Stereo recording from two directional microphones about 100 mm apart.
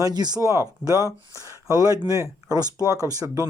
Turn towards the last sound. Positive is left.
turn(degrees=-35)  # may be behind; listen again after turning